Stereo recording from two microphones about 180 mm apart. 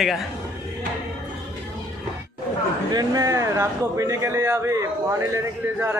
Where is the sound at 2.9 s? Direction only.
20° right (ahead or behind).